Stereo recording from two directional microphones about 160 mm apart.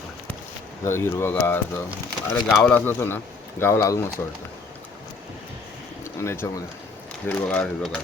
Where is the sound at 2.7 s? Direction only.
10° left (ahead or behind).